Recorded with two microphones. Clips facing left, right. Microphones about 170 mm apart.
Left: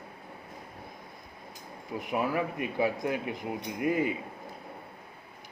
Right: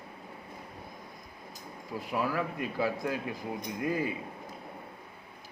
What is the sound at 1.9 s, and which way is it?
Speech, 20° left (ahead or behind).